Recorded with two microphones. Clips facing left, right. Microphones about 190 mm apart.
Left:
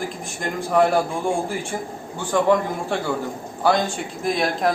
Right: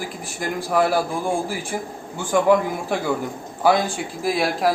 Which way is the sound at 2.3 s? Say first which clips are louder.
Right 1 dB; 10° right (ahead or behind).